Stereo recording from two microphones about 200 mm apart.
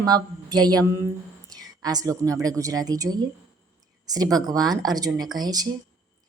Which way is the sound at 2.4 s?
15° right (ahead or behind).